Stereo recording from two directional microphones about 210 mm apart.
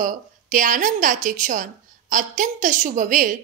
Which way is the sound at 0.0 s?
40° right (ahead or behind).